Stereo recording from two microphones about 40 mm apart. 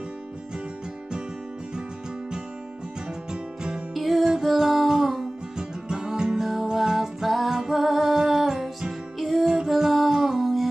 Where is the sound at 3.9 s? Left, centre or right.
Centre.